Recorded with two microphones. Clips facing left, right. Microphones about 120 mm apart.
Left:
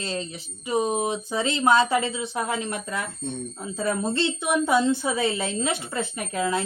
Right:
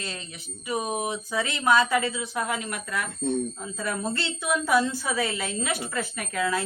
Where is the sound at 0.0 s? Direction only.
30° left (ahead or behind).